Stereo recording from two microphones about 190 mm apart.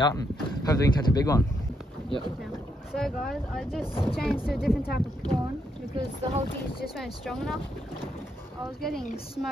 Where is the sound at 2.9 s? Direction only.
Centre (ahead or behind).